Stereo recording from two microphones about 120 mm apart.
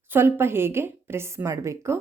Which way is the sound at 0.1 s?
20° right (ahead or behind).